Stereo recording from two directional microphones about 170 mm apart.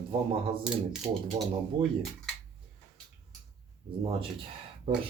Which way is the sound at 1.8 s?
30° right (ahead or behind).